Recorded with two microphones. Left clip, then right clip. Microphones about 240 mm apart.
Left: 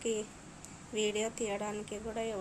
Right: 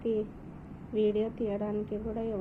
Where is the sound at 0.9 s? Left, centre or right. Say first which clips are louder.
Right 5 dB; centre.